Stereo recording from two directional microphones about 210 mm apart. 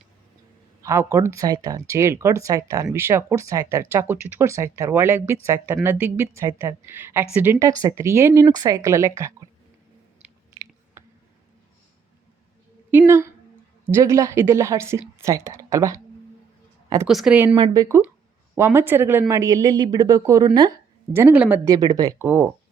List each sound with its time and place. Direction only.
0.8 s speech: 15° right (ahead or behind)
10.2 s chewing: 15° right (ahead or behind)
12.9 s a woman's voice: 10° right (ahead or behind)
17.1 s a woman's voice: centre (ahead or behind)
17.5 s speech: 20° right (ahead or behind)